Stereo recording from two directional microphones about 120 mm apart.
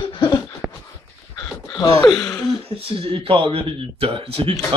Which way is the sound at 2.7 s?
50° right (ahead or behind).